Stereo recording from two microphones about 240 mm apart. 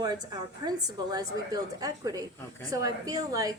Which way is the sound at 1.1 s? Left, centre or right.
Centre.